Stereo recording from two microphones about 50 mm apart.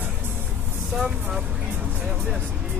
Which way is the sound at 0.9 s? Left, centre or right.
Centre.